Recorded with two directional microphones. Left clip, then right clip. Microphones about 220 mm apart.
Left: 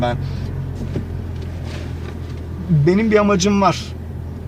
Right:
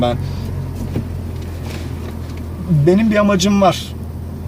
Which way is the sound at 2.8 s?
15° right (ahead or behind).